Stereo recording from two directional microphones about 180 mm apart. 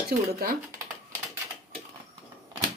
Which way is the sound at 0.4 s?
60° right (ahead or behind).